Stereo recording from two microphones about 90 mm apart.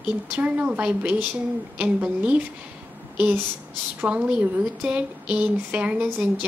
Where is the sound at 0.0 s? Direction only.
15° right (ahead or behind).